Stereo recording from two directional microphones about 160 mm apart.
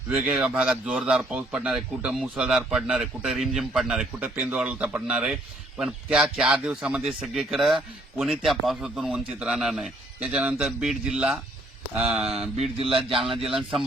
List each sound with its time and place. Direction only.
0.1 s a man's voice: 5° right (ahead or behind)
12.2 s speech: 40° right (ahead or behind)
13.6 s a man's voice: centre (ahead or behind)